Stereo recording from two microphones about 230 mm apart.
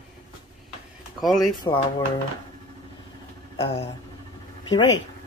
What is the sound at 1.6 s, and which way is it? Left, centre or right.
Speech, centre.